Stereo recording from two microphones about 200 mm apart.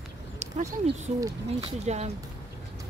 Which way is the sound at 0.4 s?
35° right (ahead or behind).